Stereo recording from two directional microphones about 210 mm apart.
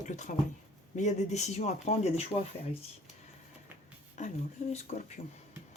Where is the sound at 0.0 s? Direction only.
35° left (ahead or behind).